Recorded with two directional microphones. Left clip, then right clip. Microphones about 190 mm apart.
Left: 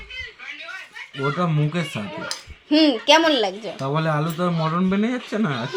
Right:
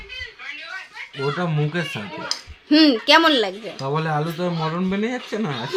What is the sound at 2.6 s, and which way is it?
Speech, 30° right (ahead or behind).